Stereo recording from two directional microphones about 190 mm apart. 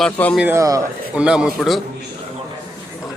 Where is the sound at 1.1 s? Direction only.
5° right (ahead or behind).